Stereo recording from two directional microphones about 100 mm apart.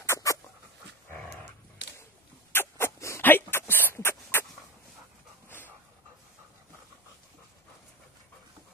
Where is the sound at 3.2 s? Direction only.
20° left (ahead or behind).